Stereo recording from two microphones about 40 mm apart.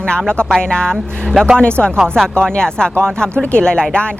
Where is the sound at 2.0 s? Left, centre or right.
Centre.